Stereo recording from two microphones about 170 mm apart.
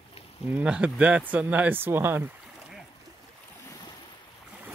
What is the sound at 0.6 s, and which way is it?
Speech, 5° right (ahead or behind).